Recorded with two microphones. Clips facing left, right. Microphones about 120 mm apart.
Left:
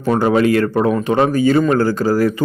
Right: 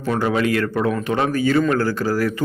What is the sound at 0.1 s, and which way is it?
A man's voice, 35° left (ahead or behind).